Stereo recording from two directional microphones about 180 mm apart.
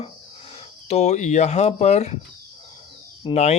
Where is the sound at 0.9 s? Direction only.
35° left (ahead or behind).